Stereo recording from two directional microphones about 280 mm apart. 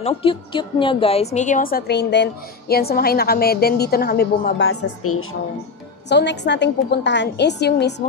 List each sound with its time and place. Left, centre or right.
0.0 s a woman's voice: centre; by 5.2 s left
6.0 s a woman's voice: left